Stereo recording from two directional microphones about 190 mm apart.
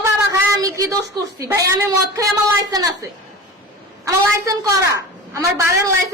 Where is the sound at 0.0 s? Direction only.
20° right (ahead or behind).